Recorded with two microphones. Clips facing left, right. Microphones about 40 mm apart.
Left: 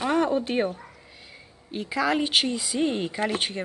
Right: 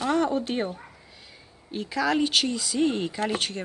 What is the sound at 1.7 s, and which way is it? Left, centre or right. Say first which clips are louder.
Speech: even; centre.